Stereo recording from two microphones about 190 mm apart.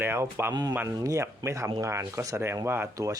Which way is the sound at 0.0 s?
10° right (ahead or behind).